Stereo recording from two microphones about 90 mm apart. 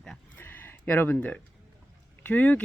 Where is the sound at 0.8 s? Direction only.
20° left (ahead or behind).